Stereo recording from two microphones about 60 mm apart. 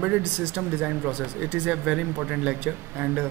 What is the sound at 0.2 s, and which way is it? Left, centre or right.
A man's voice, right.